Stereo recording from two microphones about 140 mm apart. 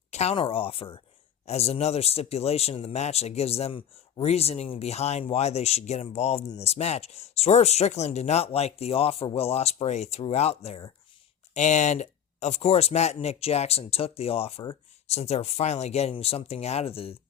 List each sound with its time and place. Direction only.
0.1 s speech: 50° left (ahead or behind)
11.5 s speech: 55° left (ahead or behind)